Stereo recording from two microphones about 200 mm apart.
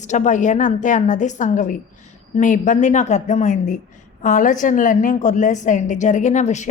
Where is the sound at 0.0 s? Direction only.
35° left (ahead or behind).